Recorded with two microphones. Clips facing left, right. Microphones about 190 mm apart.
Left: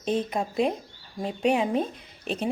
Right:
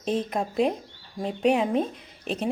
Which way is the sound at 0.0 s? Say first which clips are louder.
Even; centre (ahead or behind).